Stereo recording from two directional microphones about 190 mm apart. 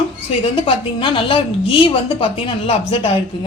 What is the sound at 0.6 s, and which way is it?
A woman's voice, 25° left (ahead or behind).